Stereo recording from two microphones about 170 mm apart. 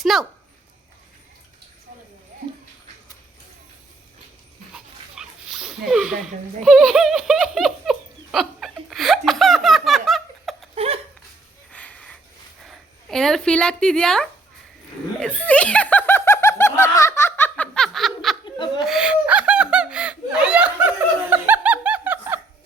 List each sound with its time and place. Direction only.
0.0 s speech: centre (ahead or behind)
4.7 s dog: 5° right (ahead or behind)
6.7 s giggle: 5° right (ahead or behind)
10.8 s laughter: 35° right (ahead or behind)
11.7 s a sound: 10° left (ahead or behind)
12.6 s speech: 5° left (ahead or behind)
15.2 s snicker: 10° left (ahead or behind)
18.4 s laughter: 25° left (ahead or behind)
18.9 s laughter: 5° right (ahead or behind)